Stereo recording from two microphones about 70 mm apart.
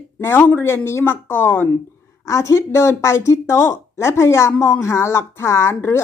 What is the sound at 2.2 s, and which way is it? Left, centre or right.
Speech, left.